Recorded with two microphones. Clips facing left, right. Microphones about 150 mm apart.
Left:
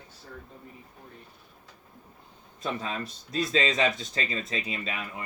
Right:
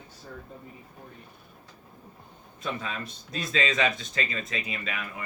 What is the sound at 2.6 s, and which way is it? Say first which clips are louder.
Speech: left 1 dB; 35° left (ahead or behind).